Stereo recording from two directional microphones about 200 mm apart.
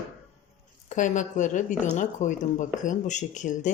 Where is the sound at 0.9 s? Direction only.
40° left (ahead or behind).